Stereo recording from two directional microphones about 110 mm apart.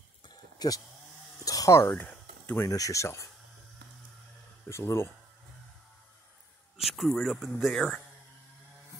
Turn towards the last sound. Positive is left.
turn(degrees=5)  # may be behind; listen again after turning